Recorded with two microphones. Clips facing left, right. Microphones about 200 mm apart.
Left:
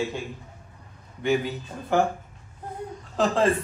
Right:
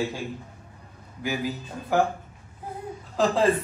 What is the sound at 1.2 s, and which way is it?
Speech, centre (ahead or behind).